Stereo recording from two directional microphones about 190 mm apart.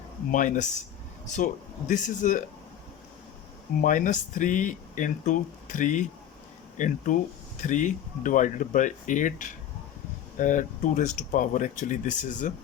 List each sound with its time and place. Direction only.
0.3 s speech: 45° left (ahead or behind)
1.9 s speech: 40° left (ahead or behind)
3.8 s speech: 45° left (ahead or behind)